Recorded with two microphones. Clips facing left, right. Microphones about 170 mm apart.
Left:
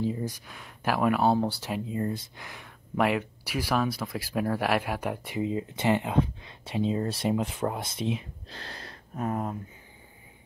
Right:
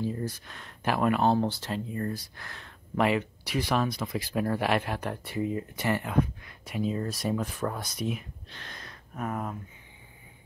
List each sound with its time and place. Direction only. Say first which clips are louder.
0.0 s speech: left 2 dB; 15° left (ahead or behind)